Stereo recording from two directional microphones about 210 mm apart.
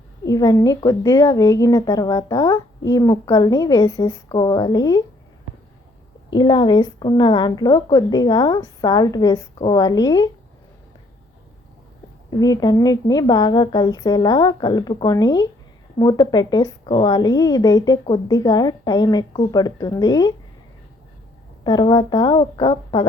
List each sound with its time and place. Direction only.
0.3 s a woman's voice: 15° left (ahead or behind)
6.3 s a woman's voice: 20° left (ahead or behind)
12.4 s a woman's voice: 20° left (ahead or behind)
21.6 s a woman's voice: 20° left (ahead or behind)